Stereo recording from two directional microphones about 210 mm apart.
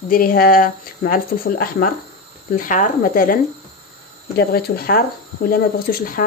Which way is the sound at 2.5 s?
40° left (ahead or behind).